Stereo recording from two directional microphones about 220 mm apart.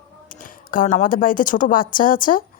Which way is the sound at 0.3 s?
35° left (ahead or behind).